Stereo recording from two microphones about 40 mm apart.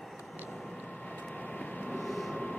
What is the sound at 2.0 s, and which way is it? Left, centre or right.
Vehicle, centre.